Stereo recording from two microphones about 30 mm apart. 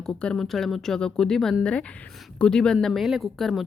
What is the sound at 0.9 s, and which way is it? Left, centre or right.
Speech, left.